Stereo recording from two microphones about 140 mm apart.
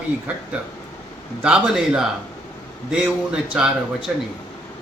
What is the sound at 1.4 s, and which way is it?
A man's voice, 5° right (ahead or behind).